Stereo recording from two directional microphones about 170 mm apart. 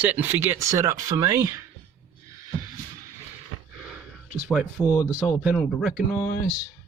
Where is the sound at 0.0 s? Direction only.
10° right (ahead or behind).